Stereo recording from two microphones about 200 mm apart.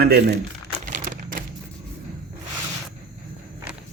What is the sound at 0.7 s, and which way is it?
Crumpling, 40° right (ahead or behind).